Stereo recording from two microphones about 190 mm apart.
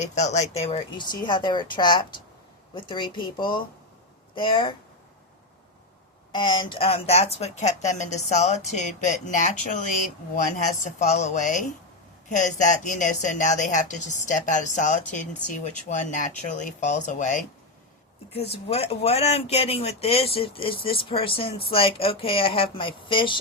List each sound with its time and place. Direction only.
0.0 s speech: 40° left (ahead or behind)
6.3 s speech: 25° left (ahead or behind)